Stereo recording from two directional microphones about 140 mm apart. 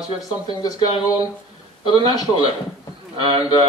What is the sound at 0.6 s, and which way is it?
A man's voice, 25° left (ahead or behind).